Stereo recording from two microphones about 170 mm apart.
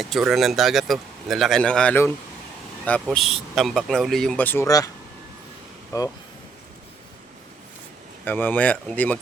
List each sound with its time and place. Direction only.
0.0 s speech: centre (ahead or behind); by 4.9 s 20° left (ahead or behind)
5.9 s speech: 20° left (ahead or behind)
8.2 s speech: 10° left (ahead or behind)